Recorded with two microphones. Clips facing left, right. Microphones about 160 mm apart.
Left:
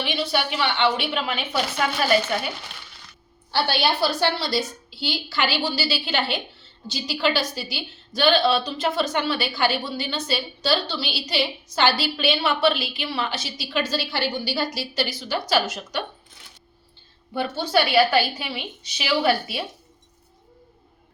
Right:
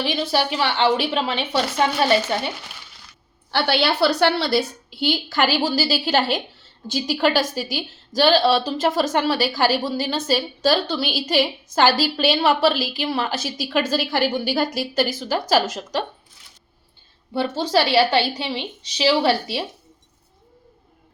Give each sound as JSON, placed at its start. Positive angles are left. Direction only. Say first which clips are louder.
{"t": 0.0, "sound": "a woman's voice", "louder": "right 3 dB", "side_deg": -35}
{"t": 3.5, "sound": "a woman's voice", "louder": "right 2 dB", "side_deg": -70}
{"t": 4.9, "sound": "a woman's voice", "louder": "right 6 dB", "side_deg": -55}
{"t": 17.3, "sound": "a woman's voice", "louder": "right 2 dB", "side_deg": -30}